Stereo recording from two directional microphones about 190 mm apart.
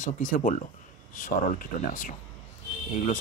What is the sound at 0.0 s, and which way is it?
A man's voice, 45° left (ahead or behind).